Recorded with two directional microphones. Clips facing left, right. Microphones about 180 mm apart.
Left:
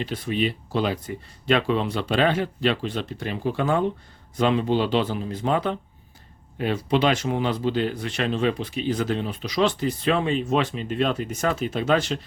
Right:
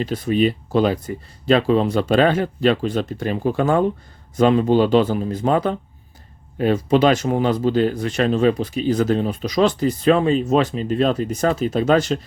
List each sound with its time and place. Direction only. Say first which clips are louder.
0.0 s speech: right 7 dB; 40° right (ahead or behind)